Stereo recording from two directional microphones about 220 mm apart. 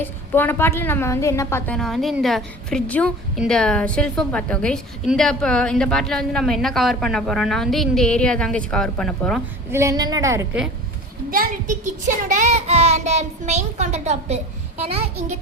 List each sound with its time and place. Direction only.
0.0 s a woman's voice: 10° left (ahead or behind)
9.7 s a woman's voice: 15° right (ahead or behind)
11.3 s a child's voice: 40° right (ahead or behind)